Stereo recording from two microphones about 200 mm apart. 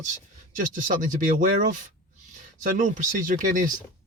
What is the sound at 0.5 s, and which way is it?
Speech, 40° right (ahead or behind).